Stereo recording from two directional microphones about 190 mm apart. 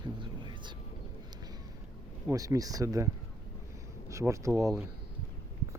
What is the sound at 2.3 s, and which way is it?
Speech, 20° right (ahead or behind).